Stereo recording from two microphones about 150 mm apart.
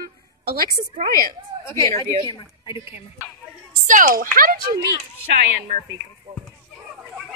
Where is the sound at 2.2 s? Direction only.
25° left (ahead or behind).